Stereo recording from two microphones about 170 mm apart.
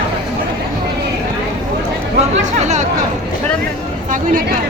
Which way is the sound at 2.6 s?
45° right (ahead or behind).